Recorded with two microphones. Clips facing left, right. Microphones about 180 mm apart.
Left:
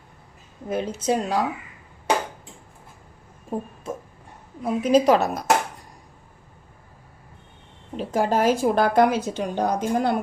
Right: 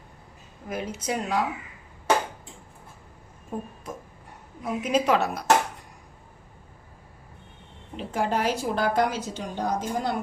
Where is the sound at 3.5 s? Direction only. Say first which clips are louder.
Left 4 dB; 35° left (ahead or behind).